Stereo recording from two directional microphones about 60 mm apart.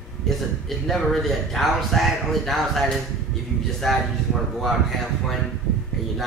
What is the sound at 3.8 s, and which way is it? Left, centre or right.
Speech, centre.